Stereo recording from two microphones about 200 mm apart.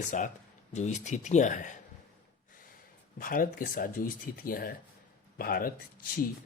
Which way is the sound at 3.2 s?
45° left (ahead or behind).